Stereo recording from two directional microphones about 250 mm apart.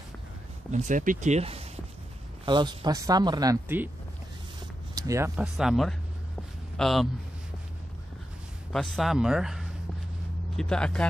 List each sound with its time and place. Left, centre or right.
0.7 s speech: right; by 3.9 s centre
4.9 s speech: centre
8.7 s speech: centre